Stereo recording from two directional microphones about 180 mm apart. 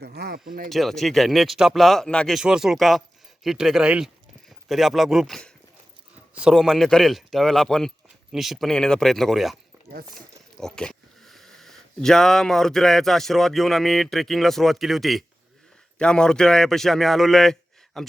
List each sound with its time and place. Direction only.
0.0 s speech: 60° right (ahead or behind)
0.7 s speech: centre (ahead or behind)